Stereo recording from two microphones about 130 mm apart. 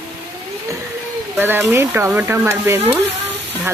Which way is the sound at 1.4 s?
15° right (ahead or behind).